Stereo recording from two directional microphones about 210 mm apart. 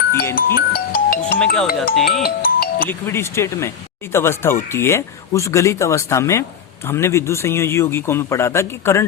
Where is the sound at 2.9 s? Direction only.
10° left (ahead or behind).